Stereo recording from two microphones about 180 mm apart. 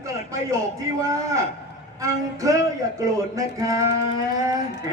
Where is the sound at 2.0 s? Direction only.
15° right (ahead or behind).